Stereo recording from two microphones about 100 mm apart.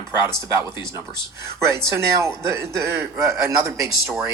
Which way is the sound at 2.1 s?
25° right (ahead or behind).